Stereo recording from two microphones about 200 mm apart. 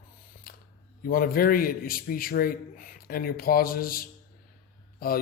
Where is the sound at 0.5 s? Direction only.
45° left (ahead or behind).